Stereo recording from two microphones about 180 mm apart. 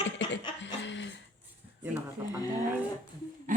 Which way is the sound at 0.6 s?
80° left.